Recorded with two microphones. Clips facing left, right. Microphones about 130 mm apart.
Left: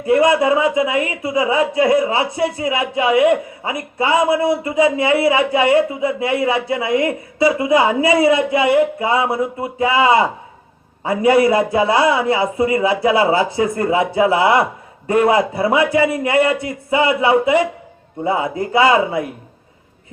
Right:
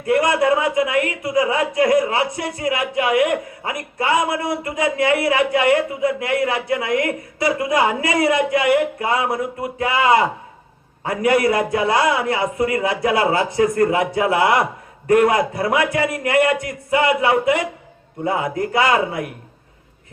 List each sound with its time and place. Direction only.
0.0 s a man's voice: 25° left (ahead or behind)